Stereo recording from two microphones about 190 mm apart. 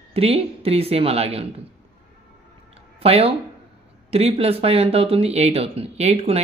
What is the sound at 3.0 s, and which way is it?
Speech, 30° right (ahead or behind).